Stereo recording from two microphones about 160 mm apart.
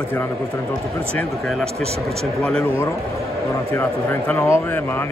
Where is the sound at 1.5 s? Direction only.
Centre (ahead or behind).